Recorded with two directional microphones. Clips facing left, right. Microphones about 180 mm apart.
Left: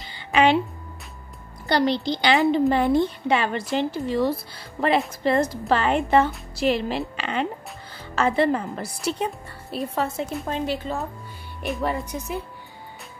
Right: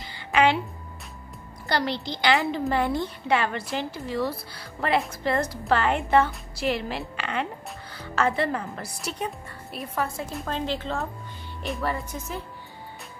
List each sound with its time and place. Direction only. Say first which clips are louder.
0.0 s a sound: left 2 dB; 25° left (ahead or behind)
1.7 s a woman's voice: left 6 dB; 25° left (ahead or behind)
10.4 s speech: even; 10° left (ahead or behind)
12.1 s speech: left 4 dB; 15° left (ahead or behind)